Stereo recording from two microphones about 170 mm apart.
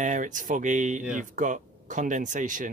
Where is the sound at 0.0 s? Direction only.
50° right (ahead or behind).